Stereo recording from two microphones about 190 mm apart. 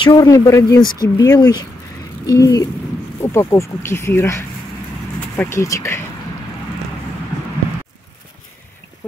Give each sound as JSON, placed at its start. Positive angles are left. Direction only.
{"t": 0.0, "sound": "speech", "side_deg": 20}